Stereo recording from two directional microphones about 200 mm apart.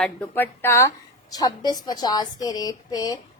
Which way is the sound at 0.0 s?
10° left (ahead or behind).